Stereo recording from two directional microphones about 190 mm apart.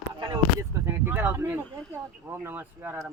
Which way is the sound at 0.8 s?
10° right (ahead or behind).